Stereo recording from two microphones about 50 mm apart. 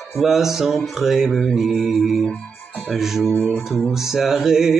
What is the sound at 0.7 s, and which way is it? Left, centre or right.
Music, centre.